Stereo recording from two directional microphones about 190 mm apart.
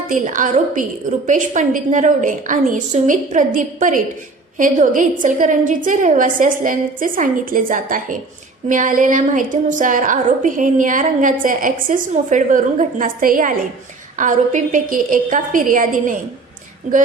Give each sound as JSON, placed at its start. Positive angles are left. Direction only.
{"t": 0.1, "sound": "a woman's voice", "side_deg": -45}